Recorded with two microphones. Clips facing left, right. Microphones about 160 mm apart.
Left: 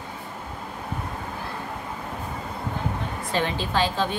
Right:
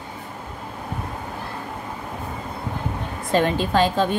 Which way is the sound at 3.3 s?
45° right (ahead or behind).